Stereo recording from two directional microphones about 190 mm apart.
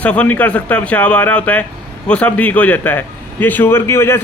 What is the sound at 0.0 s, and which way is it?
A man's voice, 5° left (ahead or behind).